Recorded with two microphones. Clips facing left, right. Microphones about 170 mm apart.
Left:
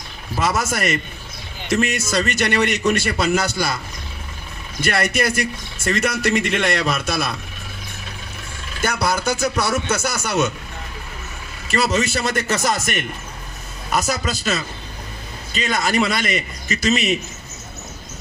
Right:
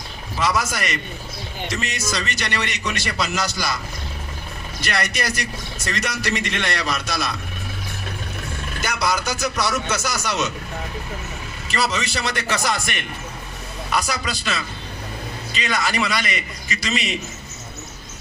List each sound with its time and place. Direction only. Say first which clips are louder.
0.3 s a man's voice: left 1 dB; 50° left (ahead or behind)
4.8 s a man's voice: left 5 dB; 50° left (ahead or behind)
8.8 s a man's voice: left 3 dB; 55° left (ahead or behind)
11.7 s a man's voice: left 4 dB; 50° left (ahead or behind)